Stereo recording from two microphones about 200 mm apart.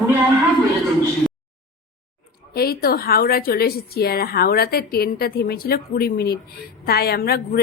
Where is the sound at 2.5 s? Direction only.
50° left (ahead or behind).